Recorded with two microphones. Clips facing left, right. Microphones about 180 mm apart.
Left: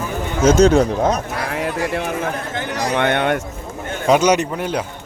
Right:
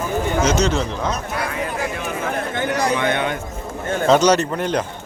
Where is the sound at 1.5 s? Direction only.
70° left (ahead or behind).